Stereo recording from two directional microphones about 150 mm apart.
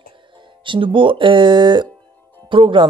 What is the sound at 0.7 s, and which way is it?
Speech, 35° right (ahead or behind).